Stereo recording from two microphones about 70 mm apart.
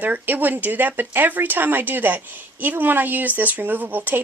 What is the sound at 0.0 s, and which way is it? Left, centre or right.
Speech, right.